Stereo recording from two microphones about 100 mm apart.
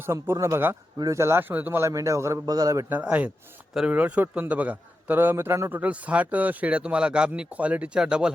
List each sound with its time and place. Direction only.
0.0 s speech: 25° right (ahead or behind)
1.9 s a man's voice: 30° right (ahead or behind)
2.9 s speech: 15° right (ahead or behind)
5.7 s speech: 15° right (ahead or behind)